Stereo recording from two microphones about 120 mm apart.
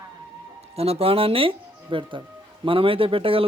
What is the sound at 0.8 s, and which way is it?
A man's voice, 55° right (ahead or behind).